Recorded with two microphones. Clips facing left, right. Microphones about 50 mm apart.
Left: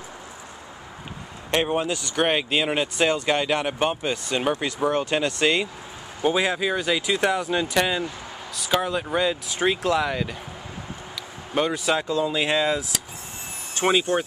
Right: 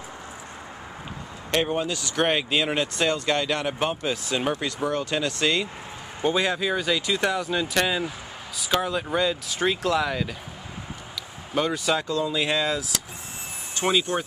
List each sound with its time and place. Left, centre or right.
1.5 s speech: centre
11.5 s speech: centre
13.7 s speech: centre